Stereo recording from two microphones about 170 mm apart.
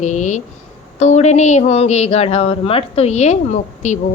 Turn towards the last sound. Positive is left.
turn(degrees=45)  # may be behind; listen again after turning